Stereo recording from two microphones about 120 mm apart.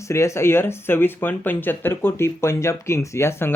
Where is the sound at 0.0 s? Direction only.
25° left (ahead or behind).